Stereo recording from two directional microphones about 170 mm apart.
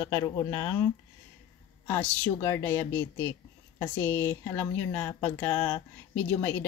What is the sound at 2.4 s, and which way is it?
A woman's voice, 15° left (ahead or behind).